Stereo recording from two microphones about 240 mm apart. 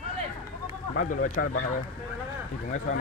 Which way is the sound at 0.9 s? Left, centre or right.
Left.